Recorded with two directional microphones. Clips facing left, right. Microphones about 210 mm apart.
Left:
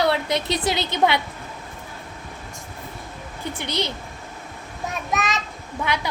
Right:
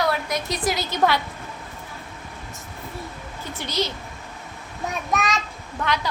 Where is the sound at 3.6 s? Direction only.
60° left (ahead or behind).